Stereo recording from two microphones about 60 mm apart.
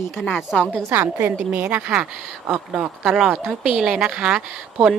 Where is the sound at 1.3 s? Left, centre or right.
Right.